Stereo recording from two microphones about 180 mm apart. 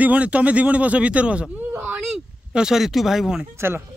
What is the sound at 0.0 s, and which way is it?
Speech, 10° right (ahead or behind).